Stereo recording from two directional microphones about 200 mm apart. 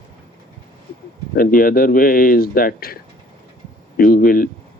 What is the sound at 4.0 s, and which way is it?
Speech, 50° left (ahead or behind).